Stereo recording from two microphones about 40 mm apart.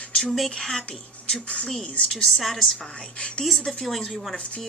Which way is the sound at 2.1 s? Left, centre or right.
Centre.